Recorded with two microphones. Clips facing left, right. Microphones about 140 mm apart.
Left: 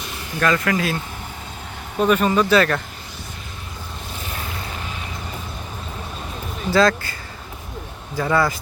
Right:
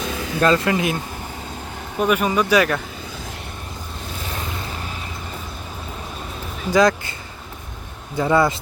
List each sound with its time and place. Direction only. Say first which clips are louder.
0.4 s speech: right 2 dB; 25° right (ahead or behind)
2.0 s speech: left 2 dB; 10° right (ahead or behind)
6.7 s speech: right 1 dB; 15° right (ahead or behind)